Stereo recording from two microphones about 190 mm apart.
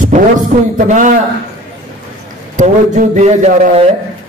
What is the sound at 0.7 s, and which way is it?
Speech, 40° right (ahead or behind).